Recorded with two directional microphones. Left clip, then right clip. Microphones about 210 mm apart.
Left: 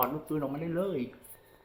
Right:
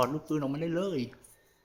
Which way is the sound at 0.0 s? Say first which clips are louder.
Right 2 dB; 50° right (ahead or behind).